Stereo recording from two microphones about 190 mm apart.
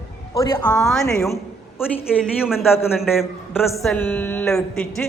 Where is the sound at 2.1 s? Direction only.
Centre (ahead or behind).